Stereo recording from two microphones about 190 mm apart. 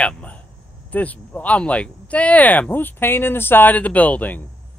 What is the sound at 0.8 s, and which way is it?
Speech, 10° left (ahead or behind).